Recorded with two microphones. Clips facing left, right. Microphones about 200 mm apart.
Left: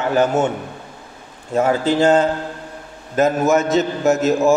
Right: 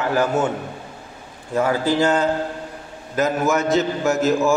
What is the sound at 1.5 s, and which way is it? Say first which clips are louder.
Mantra: left 2 dB; 25° left (ahead or behind).